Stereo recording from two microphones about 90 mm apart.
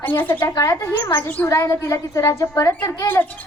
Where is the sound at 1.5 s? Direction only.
35° left (ahead or behind).